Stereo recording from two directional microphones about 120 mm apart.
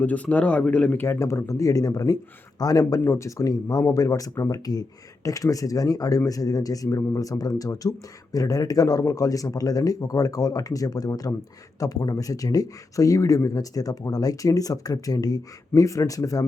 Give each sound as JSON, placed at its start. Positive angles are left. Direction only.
{"t": 0.0, "sound": "speech", "side_deg": 10}
{"t": 1.0, "sound": "speech", "side_deg": 25}